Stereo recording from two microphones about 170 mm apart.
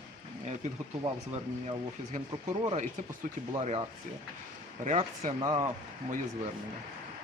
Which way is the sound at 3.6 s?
35° right (ahead or behind).